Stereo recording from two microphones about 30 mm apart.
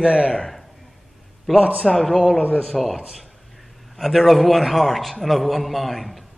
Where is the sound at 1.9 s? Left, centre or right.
Centre.